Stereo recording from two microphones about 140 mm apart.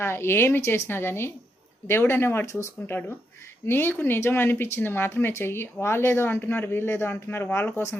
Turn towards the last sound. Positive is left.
turn(degrees=15)  # may be behind; listen again after turning